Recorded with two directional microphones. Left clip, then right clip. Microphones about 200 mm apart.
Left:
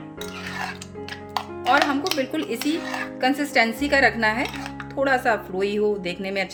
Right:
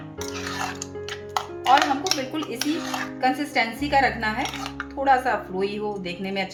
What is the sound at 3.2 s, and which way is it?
A woman's voice, 50° left (ahead or behind).